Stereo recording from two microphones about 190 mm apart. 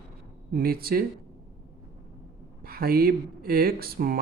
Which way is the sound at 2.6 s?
50° right (ahead or behind).